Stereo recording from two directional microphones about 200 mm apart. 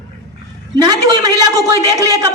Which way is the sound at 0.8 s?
20° right (ahead or behind).